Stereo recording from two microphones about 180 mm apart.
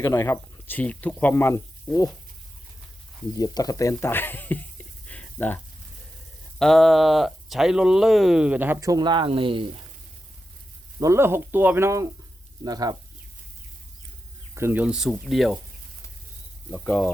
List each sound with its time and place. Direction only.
0.0 s speech: 15° left (ahead or behind)
3.3 s speech: 20° left (ahead or behind)
5.0 s a sound: 10° left (ahead or behind)
6.6 s speech: centre (ahead or behind); by 9.6 s 30° right (ahead or behind)
11.0 s speech: 15° right (ahead or behind)
14.5 s speech: 10° right (ahead or behind)
16.7 s speech: 5° left (ahead or behind)